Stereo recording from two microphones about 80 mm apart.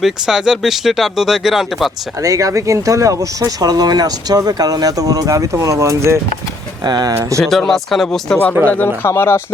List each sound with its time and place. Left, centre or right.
0.0 s speech: centre
2.2 s speech: right
6.8 s speech: right
7.3 s speech: centre
9.0 s speech: left